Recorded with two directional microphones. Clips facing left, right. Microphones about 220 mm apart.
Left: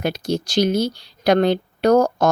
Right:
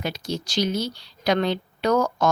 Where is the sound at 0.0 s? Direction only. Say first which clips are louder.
Left 7 dB; 50° left (ahead or behind).